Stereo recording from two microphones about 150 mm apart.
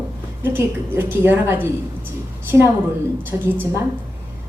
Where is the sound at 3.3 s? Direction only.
15° right (ahead or behind).